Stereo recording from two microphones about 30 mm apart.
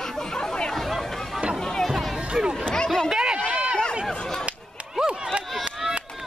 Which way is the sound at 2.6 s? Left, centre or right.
Left.